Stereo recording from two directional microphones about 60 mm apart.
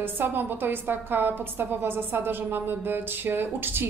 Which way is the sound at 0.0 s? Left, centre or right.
Right.